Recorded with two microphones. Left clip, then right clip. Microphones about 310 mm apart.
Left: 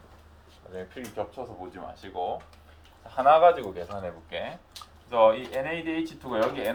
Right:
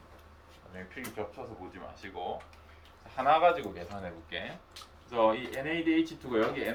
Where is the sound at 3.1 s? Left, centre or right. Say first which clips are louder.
Left 6 dB; centre.